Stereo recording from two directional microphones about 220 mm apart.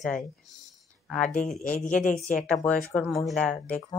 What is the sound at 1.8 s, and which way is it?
Speech, 35° left (ahead or behind).